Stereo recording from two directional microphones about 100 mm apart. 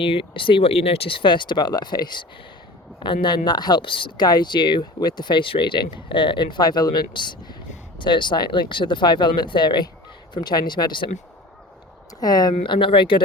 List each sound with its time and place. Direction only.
0.0 s speech: 60° left (ahead or behind)
12.2 s speech: 40° left (ahead or behind); by 13.2 s 55° left (ahead or behind)